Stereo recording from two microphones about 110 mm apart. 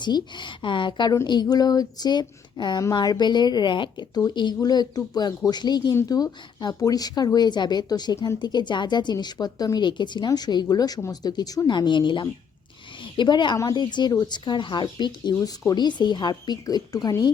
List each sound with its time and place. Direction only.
0.0 s speech: 45° left (ahead or behind)